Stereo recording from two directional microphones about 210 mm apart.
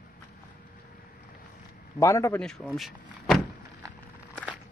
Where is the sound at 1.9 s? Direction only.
15° left (ahead or behind).